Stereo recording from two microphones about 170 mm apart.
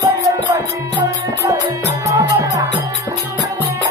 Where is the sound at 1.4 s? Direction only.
20° right (ahead or behind).